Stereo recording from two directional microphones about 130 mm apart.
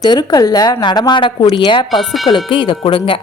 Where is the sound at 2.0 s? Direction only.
Centre (ahead or behind).